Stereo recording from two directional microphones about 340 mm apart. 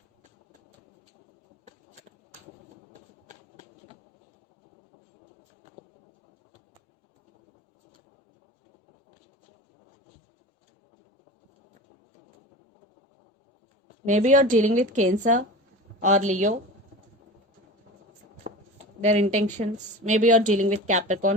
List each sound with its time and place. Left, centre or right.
3.2 s run: right
14.0 s speech: right
18.5 s a sound: right
19.0 s speech: right